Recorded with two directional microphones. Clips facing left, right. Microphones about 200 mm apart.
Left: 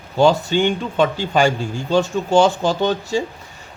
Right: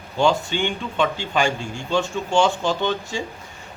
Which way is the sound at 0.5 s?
40° left (ahead or behind).